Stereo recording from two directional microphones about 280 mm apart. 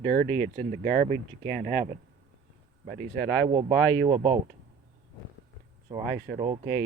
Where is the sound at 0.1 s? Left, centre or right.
Right.